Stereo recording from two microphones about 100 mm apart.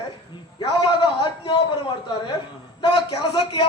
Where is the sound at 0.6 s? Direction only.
50° left (ahead or behind).